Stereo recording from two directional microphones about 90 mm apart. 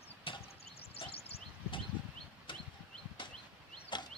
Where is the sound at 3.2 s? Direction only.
65° left (ahead or behind).